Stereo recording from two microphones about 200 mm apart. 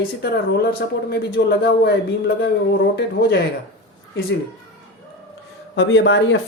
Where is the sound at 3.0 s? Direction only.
55° left (ahead or behind).